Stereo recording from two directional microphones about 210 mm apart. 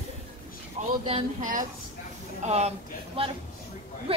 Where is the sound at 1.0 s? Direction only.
35° right (ahead or behind).